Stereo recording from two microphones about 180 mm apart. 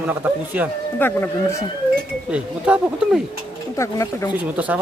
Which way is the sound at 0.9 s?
10° left (ahead or behind).